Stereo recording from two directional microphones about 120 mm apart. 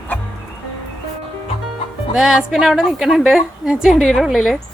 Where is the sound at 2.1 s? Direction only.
5° right (ahead or behind).